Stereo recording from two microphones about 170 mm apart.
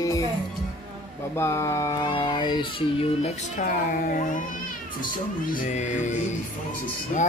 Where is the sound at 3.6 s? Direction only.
50° left (ahead or behind).